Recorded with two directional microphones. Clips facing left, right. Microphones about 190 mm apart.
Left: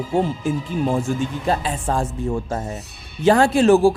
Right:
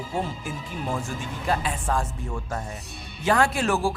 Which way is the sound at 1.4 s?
30° left (ahead or behind).